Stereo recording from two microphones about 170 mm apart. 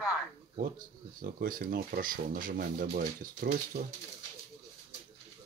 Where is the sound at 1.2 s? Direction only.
55° right (ahead or behind).